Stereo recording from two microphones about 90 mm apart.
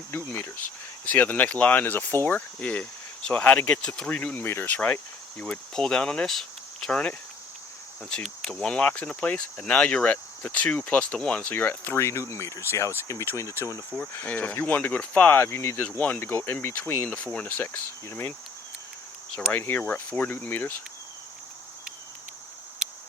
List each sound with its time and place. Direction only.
0.1 s speech: 25° left (ahead or behind)
14.2 s speech: 20° left (ahead or behind)
16.0 s speech: 15° left (ahead or behind)
16.2 s speech: 25° left (ahead or behind)
19.5 s speech: 25° left (ahead or behind)